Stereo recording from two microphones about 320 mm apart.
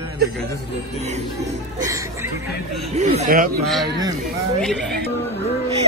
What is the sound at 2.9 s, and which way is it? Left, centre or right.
Speech, right.